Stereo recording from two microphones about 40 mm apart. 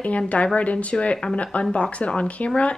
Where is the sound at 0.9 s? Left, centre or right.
Left.